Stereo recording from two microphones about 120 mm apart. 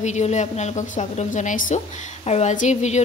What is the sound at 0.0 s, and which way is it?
Speech, 75° left (ahead or behind).